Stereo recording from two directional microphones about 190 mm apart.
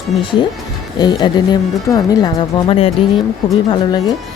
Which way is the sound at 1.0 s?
20° left (ahead or behind).